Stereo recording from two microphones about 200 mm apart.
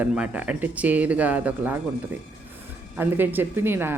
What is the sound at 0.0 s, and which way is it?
Speech, 5° right (ahead or behind).